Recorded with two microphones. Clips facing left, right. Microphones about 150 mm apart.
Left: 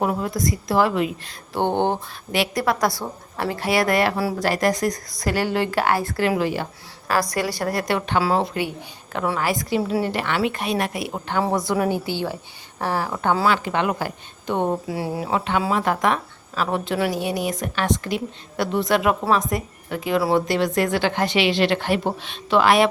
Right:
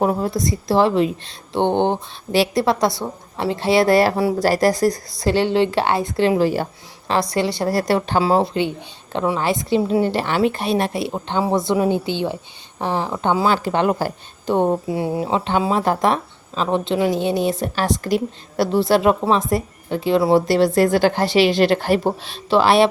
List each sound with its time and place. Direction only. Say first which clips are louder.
0.0 s speech: right 3 dB; 30° right (ahead or behind)
2.3 s speech: right 5 dB; 30° right (ahead or behind)
7.1 s speech: right 3 dB; 25° right (ahead or behind)
13.7 s a woman's voice: right 4 dB; 35° right (ahead or behind)
14.9 s a woman's voice: right 4 dB; 25° right (ahead or behind)